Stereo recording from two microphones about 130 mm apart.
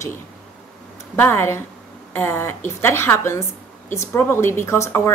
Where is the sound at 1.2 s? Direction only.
20° left (ahead or behind).